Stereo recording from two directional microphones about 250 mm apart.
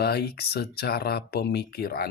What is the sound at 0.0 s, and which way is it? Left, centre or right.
Speech, left.